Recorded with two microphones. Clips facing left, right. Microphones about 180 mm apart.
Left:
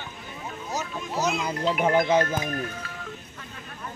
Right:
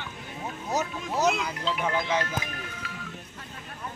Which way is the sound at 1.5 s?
40° left (ahead or behind).